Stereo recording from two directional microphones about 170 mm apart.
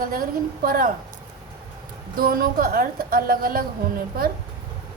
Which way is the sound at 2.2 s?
60° right (ahead or behind).